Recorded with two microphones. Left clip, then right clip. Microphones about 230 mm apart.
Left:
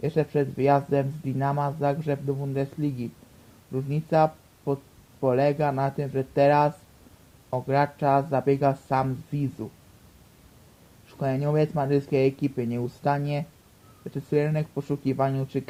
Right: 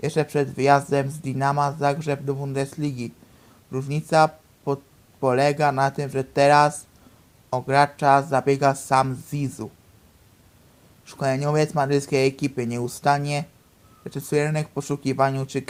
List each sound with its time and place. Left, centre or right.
0.0 s speech: right
11.0 s speech: right